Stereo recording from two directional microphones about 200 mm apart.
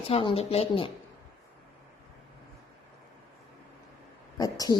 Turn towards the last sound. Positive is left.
turn(degrees=20)  # may be behind; listen again after turning